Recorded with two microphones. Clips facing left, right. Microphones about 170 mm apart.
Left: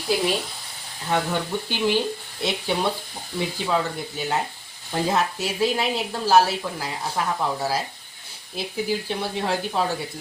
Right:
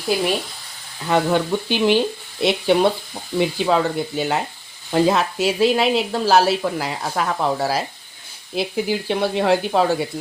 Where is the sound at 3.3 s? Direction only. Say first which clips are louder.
Right 6 dB; 80° right.